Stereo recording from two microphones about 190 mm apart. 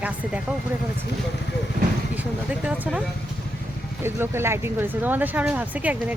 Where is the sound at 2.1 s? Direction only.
5° right (ahead or behind).